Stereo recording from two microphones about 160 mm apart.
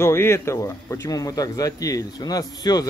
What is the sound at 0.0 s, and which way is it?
A man's voice, 15° left (ahead or behind).